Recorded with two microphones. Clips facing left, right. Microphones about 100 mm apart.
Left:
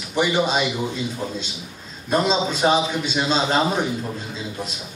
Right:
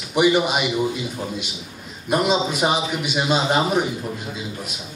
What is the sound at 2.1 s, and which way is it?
A man's voice, 10° right (ahead or behind).